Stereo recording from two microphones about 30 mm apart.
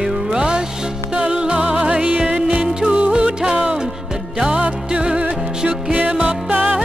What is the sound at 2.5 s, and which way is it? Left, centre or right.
Music, right.